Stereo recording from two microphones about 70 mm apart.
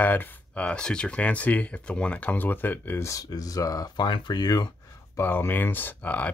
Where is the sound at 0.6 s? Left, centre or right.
Centre; by 3.0 s left.